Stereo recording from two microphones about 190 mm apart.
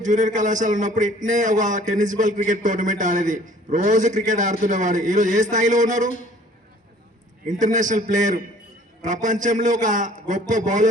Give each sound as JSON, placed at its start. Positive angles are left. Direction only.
{"t": 0.0, "sound": "a man's voice", "side_deg": -40}
{"t": 7.6, "sound": "a man's voice", "side_deg": -40}